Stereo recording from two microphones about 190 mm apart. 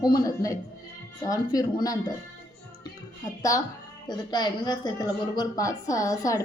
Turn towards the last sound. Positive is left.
turn(degrees=20)  # may be behind; listen again after turning